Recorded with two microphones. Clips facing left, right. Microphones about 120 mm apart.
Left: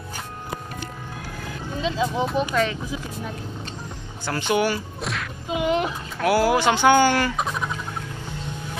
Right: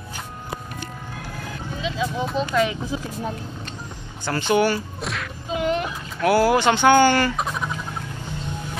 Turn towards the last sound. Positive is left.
turn(degrees=0)  # may be behind; listen again after turning